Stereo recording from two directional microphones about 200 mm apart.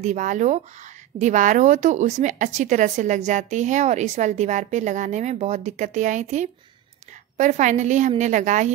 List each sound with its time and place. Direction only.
0.0 s a woman's voice: 40° right (ahead or behind)